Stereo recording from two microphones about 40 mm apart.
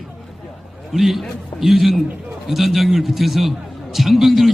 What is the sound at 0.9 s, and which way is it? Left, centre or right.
A man's voice, centre.